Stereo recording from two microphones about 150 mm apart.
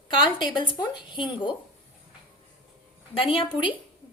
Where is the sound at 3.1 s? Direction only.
35° left (ahead or behind).